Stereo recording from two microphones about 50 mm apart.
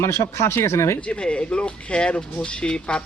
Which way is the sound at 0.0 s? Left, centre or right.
Left.